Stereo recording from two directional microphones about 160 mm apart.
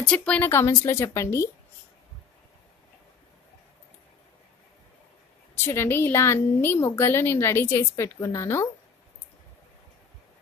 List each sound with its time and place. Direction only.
0.0 s a woman's voice: 5° left (ahead or behind)
5.7 s a woman's voice: 15° left (ahead or behind)